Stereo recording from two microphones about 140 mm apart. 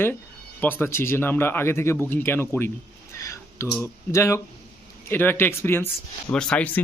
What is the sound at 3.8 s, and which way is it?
Speech, 20° left (ahead or behind).